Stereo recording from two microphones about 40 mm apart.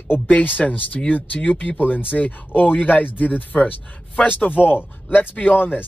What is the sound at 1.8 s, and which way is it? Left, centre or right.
A man's voice, left.